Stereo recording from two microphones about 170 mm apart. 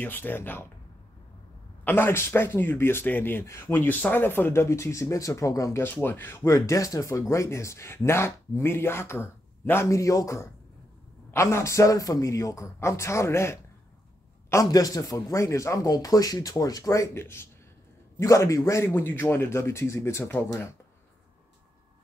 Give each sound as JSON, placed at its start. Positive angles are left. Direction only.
{"t": 0.0, "sound": "speech", "side_deg": 10}
{"t": 1.9, "sound": "speech", "side_deg": 15}